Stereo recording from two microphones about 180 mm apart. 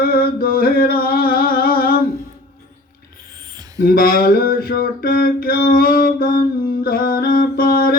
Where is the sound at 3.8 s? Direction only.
55° left (ahead or behind).